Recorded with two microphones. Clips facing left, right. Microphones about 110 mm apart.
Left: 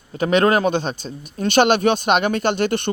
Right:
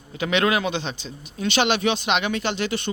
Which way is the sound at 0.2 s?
40° left (ahead or behind).